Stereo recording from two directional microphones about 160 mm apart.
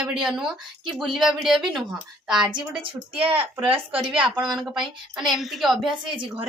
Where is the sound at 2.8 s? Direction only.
35° right (ahead or behind).